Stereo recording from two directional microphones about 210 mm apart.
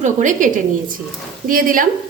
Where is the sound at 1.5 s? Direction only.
40° right (ahead or behind).